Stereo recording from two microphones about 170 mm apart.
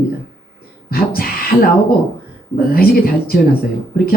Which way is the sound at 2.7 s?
60° left (ahead or behind).